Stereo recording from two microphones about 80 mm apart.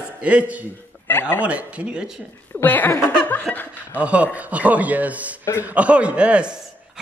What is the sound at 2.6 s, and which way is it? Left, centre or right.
Speech, left.